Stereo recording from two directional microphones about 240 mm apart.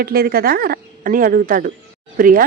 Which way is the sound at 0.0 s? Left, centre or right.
Right.